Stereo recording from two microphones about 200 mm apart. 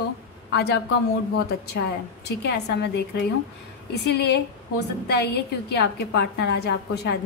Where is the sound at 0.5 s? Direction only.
55° left (ahead or behind).